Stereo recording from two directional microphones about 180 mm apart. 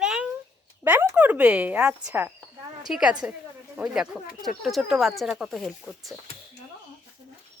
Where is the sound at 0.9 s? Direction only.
10° right (ahead or behind).